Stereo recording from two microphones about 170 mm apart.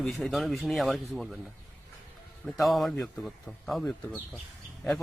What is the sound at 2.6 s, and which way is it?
Speech, centre (ahead or behind).